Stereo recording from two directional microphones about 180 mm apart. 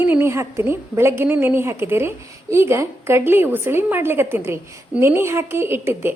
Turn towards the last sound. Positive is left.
turn(degrees=-15)  # may be behind; listen again after turning